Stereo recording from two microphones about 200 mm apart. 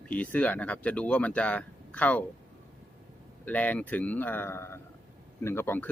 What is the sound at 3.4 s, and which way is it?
Speech, 5° left (ahead or behind).